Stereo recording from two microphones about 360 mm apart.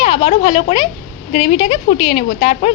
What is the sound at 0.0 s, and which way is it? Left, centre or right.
A woman's voice, centre.